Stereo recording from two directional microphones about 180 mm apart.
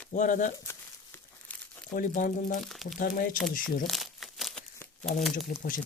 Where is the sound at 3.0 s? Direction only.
50° left (ahead or behind).